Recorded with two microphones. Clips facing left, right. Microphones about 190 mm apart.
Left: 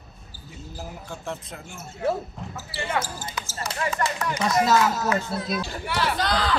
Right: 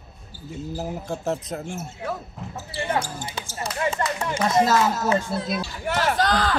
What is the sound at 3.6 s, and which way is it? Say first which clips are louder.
Speech: right 2 dB; 30° right (ahead or behind).